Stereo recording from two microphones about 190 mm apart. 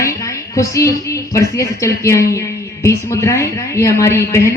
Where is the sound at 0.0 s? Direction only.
15° left (ahead or behind).